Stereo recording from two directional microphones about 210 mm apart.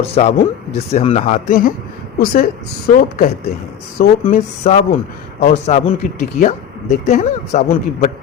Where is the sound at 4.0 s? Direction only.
45° left (ahead or behind).